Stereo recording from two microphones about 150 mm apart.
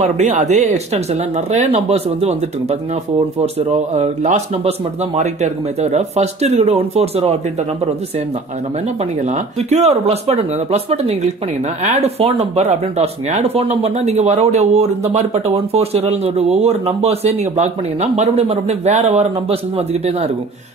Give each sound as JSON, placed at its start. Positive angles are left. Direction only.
{"t": 0.0, "sound": "speech", "side_deg": -50}
{"t": 3.9, "sound": "speech", "side_deg": -50}
{"t": 9.7, "sound": "speech", "side_deg": -45}